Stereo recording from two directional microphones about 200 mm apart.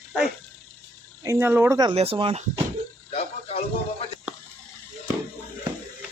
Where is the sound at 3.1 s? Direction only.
30° left (ahead or behind).